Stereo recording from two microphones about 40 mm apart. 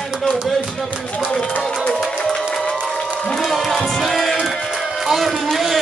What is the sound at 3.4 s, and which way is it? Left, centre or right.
Music, centre.